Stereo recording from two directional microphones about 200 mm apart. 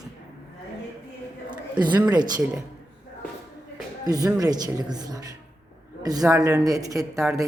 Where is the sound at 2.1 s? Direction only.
20° right (ahead or behind).